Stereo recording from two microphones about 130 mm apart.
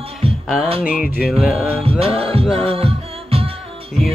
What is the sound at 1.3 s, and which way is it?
Music, 5° right (ahead or behind).